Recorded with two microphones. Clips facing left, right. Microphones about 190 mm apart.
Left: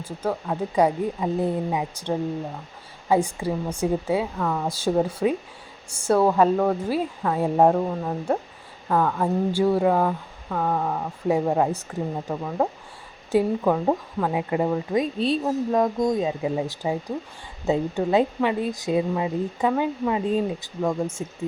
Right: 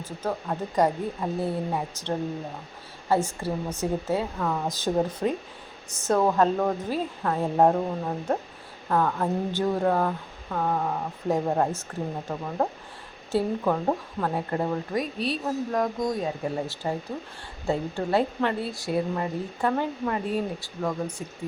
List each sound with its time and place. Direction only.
0.0 s speech: 10° left (ahead or behind)
4.4 s speech: centre (ahead or behind)
4.7 s speech: 10° left (ahead or behind)
15.2 s speech: 25° left (ahead or behind)